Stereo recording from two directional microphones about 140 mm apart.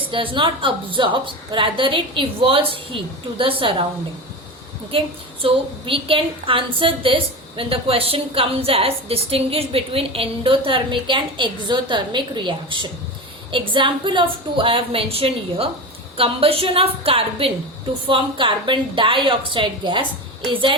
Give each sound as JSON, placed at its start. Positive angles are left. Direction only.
{"t": 0.1, "sound": "a woman's voice", "side_deg": -35}
{"t": 4.9, "sound": "a woman's voice", "side_deg": -40}